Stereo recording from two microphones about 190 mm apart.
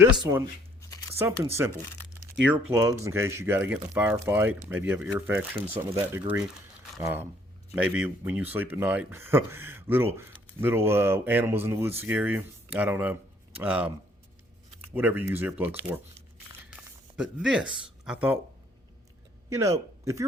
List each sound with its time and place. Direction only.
1.2 s speech: 15° right (ahead or behind)
17.2 s speech: 5° right (ahead or behind)
19.5 s speech: 15° right (ahead or behind)